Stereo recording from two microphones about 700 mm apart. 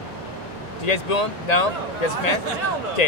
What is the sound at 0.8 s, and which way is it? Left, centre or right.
Speech, left.